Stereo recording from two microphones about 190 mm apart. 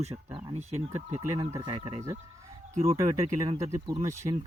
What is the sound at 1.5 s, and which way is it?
Speech, 20° right (ahead or behind).